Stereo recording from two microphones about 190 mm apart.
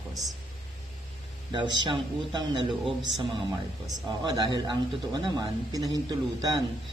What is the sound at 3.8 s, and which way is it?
Speech, 20° right (ahead or behind).